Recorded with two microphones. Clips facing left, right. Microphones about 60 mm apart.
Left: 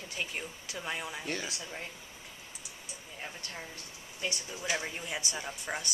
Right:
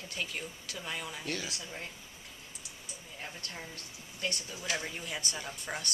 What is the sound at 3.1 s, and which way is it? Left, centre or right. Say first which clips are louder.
Speech: left 1 dB; centre.